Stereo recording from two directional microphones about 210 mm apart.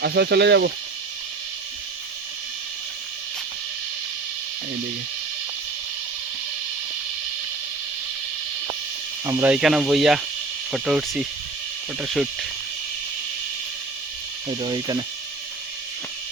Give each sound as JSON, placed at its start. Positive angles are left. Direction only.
{"t": 0.0, "sound": "speech", "side_deg": -50}
{"t": 9.2, "sound": "speech", "side_deg": -5}
{"t": 14.6, "sound": "speech", "side_deg": -20}